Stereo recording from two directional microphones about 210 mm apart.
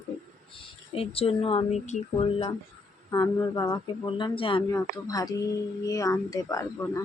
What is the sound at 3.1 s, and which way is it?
Speech, 20° left (ahead or behind).